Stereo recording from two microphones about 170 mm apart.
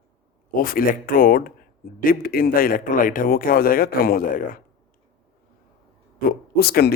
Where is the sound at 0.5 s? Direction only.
55° left (ahead or behind).